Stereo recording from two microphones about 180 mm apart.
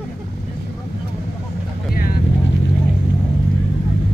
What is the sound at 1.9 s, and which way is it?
Vehicle, 55° left (ahead or behind).